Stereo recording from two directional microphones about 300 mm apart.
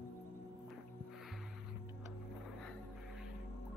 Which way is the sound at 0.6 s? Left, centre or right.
Centre.